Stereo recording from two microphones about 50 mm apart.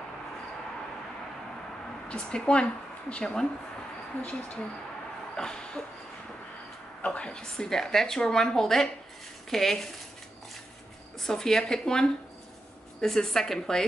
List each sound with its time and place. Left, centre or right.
2.0 s a woman's voice: left
4.2 s speech: left
5.3 s a sound: centre
7.1 s a woman's voice: centre
11.1 s a woman's voice: centre